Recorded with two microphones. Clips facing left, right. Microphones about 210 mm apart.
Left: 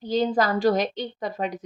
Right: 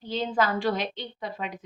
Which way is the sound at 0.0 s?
40° left (ahead or behind).